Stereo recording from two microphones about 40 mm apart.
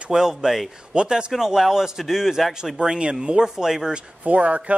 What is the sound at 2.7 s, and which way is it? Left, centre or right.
A man's voice, right.